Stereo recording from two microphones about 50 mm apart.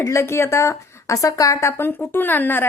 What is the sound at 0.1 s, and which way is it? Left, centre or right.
A woman's voice, left.